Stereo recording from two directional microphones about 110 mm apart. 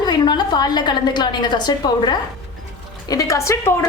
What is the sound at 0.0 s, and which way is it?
A woman's voice, 40° left (ahead or behind).